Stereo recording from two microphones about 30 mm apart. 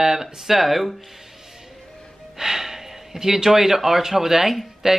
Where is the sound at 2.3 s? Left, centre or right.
Centre.